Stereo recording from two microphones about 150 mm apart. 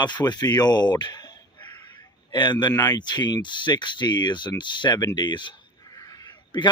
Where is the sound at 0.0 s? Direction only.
30° left (ahead or behind).